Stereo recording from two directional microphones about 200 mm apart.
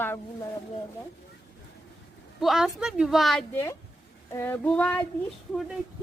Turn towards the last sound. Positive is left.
turn(degrees=0)  # may be behind; listen again after turning